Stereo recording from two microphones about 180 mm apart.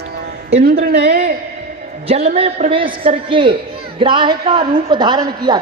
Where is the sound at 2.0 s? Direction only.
35° right (ahead or behind).